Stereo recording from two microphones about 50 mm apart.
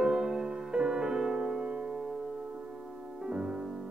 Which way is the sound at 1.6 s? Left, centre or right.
Right.